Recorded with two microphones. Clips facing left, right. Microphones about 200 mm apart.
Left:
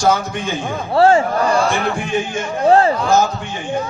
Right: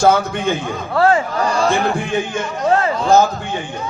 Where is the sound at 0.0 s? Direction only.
60° right (ahead or behind).